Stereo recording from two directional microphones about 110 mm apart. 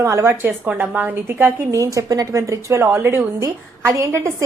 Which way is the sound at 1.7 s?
30° right (ahead or behind).